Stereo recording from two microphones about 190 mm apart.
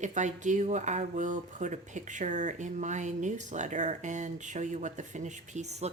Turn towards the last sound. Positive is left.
turn(degrees=-35)  # may be behind; listen again after turning